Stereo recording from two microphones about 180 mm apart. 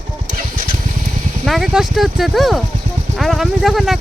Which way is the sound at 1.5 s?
Centre (ahead or behind).